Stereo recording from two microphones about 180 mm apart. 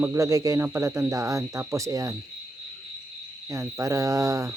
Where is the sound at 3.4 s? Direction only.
15° right (ahead or behind).